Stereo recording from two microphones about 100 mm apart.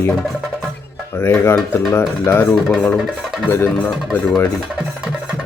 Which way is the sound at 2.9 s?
Centre (ahead or behind).